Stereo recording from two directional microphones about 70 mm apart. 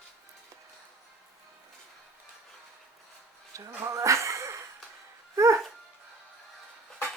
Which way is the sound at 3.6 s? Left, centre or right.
Right.